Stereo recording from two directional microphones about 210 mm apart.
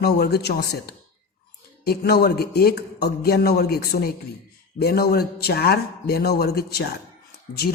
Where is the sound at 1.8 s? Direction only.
45° left (ahead or behind).